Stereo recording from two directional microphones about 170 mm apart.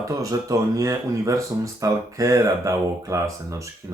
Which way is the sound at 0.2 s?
20° right (ahead or behind).